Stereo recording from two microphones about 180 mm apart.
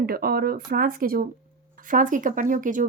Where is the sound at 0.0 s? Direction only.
55° right (ahead or behind).